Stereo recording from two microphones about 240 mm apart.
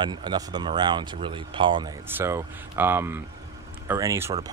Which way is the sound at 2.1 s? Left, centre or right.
Centre.